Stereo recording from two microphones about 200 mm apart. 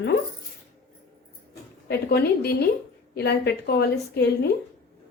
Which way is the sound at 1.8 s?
55° left (ahead or behind).